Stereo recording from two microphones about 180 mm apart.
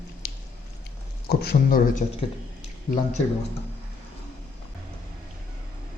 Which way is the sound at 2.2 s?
30° left (ahead or behind).